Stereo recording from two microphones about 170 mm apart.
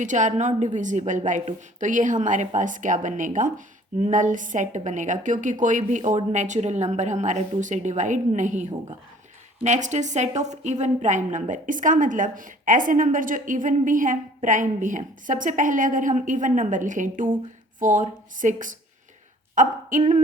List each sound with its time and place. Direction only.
0.0 s a woman's voice: 45° right (ahead or behind)